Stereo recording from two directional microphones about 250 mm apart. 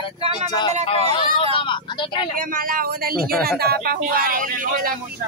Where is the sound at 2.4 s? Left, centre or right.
Right.